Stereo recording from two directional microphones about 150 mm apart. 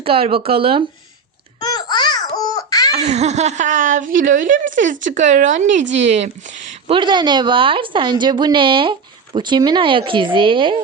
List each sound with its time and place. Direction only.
0.0 s speech: 40° right (ahead or behind)
1.5 s babbling: 25° left (ahead or behind)
2.9 s speech: 50° right (ahead or behind)
6.9 s speech: 30° right (ahead or behind)